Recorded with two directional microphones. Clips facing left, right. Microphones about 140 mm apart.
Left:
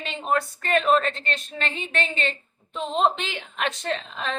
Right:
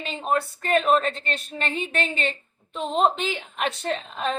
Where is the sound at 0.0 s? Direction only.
40° right (ahead or behind).